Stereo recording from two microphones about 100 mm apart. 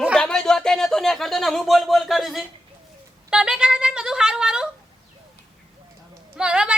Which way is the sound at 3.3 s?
10° right (ahead or behind).